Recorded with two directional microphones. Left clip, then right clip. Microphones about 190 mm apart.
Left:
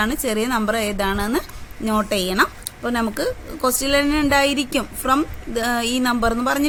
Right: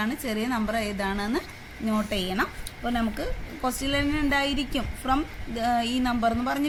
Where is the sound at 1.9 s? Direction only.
55° left (ahead or behind).